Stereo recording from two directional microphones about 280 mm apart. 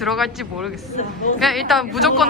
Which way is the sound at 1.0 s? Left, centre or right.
Left.